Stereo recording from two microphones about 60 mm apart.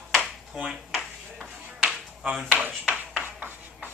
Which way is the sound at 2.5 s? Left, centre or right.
Right.